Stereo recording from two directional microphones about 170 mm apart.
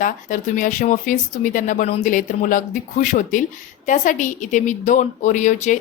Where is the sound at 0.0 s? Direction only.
50° left (ahead or behind).